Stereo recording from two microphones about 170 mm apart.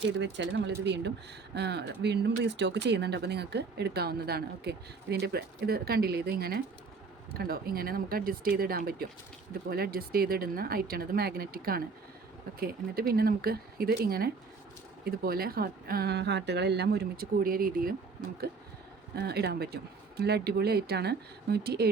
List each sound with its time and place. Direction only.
0.2 s speech: 90° right; by 17.9 s 60° right (ahead or behind)
19.1 s speech: 70° right (ahead or behind)